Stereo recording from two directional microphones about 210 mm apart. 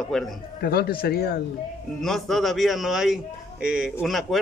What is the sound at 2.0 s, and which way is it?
A man's voice, centre (ahead or behind).